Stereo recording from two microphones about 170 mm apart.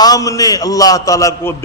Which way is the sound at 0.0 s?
20° left (ahead or behind).